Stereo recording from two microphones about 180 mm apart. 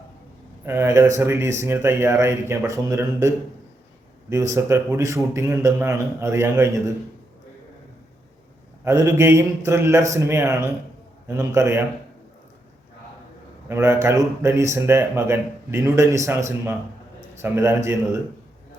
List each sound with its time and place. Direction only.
0.6 s speech: 15° right (ahead or behind)
8.8 s speech: 15° right (ahead or behind)
13.7 s speech: 15° right (ahead or behind)